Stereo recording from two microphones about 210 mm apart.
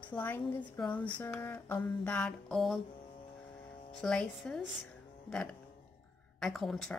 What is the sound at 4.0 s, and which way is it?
Speech, 5° left (ahead or behind).